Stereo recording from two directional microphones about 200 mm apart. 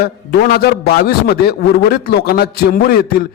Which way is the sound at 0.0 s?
50° left (ahead or behind).